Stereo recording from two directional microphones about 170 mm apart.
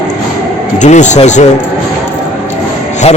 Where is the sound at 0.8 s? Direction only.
45° left (ahead or behind).